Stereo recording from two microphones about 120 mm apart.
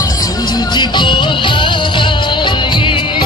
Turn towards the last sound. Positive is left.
turn(degrees=45)  # may be behind; listen again after turning